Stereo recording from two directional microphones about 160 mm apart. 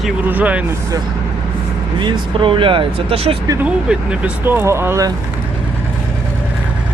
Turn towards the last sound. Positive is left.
turn(degrees=-20)  # may be behind; listen again after turning